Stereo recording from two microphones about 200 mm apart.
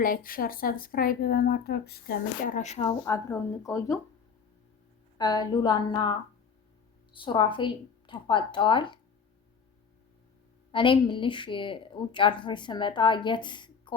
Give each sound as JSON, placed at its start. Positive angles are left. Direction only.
{"t": 0.0, "sound": "speech", "side_deg": 45}
{"t": 3.0, "sound": "speech", "side_deg": 15}
{"t": 5.1, "sound": "speech", "side_deg": 20}
{"t": 10.7, "sound": "speech", "side_deg": 25}